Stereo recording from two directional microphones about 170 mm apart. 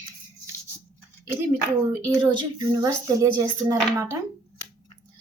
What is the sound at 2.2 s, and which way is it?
Speech, 20° right (ahead or behind).